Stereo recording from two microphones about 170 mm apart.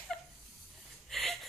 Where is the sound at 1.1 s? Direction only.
Centre (ahead or behind).